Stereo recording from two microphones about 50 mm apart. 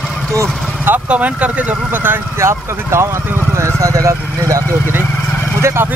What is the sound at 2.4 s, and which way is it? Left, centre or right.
Speech, right.